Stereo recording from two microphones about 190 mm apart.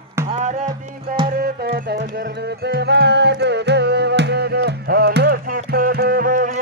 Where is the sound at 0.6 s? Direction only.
25° right (ahead or behind).